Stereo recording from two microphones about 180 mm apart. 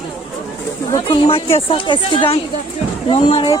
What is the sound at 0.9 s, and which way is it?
Speech, 25° left (ahead or behind).